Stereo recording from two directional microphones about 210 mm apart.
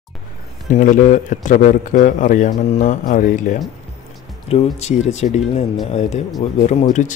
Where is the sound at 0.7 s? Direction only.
40° left (ahead or behind).